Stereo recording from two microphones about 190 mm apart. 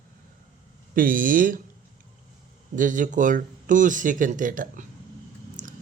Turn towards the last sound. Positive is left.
turn(degrees=-40)  # may be behind; listen again after turning